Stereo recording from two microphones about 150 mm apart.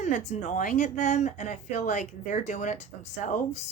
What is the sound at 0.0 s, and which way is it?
Speech, 55° left (ahead or behind).